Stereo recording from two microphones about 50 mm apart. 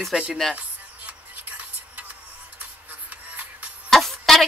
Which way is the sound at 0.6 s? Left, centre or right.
Right.